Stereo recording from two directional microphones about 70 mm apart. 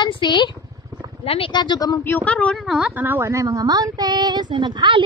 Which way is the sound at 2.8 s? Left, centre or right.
Right.